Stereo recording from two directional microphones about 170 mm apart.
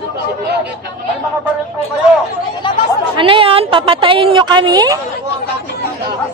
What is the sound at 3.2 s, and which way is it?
A woman's voice, 30° right (ahead or behind).